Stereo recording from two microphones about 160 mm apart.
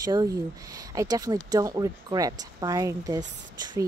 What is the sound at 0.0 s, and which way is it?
Speech, 25° right (ahead or behind).